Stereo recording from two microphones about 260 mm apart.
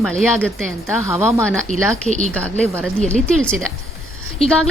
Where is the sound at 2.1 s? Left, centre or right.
Right.